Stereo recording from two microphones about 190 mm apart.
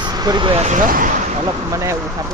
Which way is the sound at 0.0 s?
20° right (ahead or behind).